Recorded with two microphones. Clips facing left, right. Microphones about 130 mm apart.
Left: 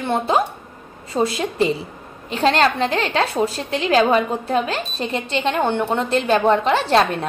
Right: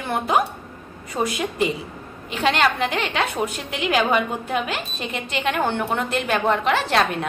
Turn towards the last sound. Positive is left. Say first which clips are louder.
# left 4 dB
turn(degrees=35)  # may be behind; listen again after turning